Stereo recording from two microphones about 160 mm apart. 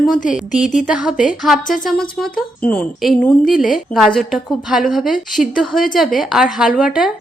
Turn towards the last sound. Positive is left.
turn(degrees=-5)  # may be behind; listen again after turning